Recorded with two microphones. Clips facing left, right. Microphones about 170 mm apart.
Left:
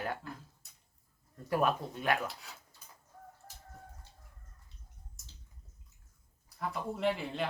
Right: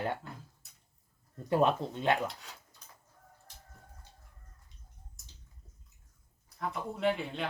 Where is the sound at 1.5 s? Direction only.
25° right (ahead or behind).